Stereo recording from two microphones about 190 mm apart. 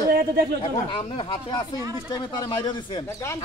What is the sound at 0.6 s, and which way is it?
Speech, 25° left (ahead or behind).